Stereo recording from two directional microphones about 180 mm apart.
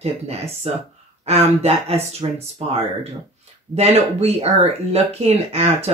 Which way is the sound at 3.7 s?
35° right (ahead or behind).